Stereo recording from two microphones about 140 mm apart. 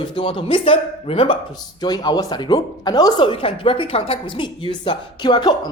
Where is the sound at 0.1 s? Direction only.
40° left (ahead or behind).